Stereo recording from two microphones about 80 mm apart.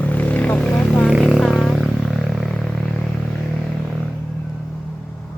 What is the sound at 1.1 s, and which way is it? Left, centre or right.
Music, centre.